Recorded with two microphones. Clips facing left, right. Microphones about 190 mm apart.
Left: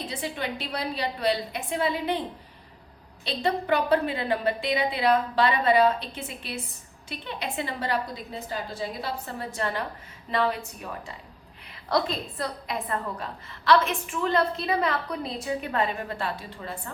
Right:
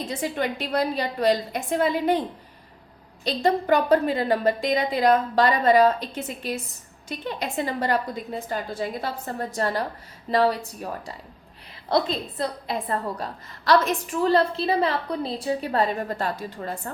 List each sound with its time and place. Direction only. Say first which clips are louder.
0.0 s a woman's voice: right 5 dB; 45° right (ahead or behind)
3.2 s a woman's voice: right 4 dB; 40° right (ahead or behind)
11.9 s a woman's voice: right 3 dB; 25° right (ahead or behind)
12.9 s a woman's voice: right 3 dB; 40° right (ahead or behind)